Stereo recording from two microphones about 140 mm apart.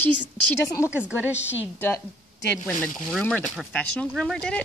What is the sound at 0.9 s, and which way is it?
Speech, 10° right (ahead or behind).